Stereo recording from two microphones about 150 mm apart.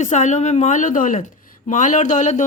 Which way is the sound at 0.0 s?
55° left (ahead or behind).